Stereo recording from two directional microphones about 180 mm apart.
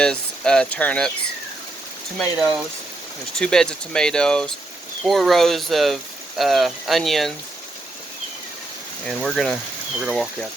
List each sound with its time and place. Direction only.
0.0 s speech: 5° left (ahead or behind)
2.1 s speech: centre (ahead or behind)
9.0 s speech: centre (ahead or behind)